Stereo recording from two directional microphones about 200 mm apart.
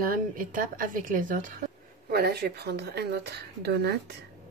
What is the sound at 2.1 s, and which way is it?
A woman's voice, 50° right (ahead or behind).